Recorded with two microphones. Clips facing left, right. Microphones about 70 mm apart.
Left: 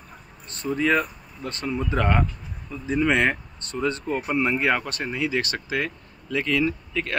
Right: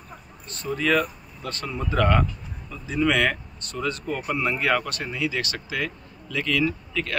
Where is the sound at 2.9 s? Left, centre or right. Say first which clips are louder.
Left 1 dB; left.